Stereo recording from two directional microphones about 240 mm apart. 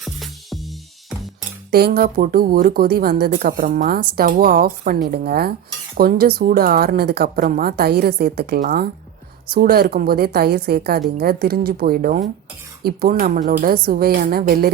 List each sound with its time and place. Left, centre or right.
0.0 s music: centre
1.7 s a woman's voice: right